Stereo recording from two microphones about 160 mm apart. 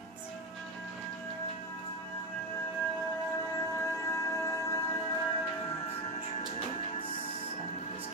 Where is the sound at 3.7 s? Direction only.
20° left (ahead or behind).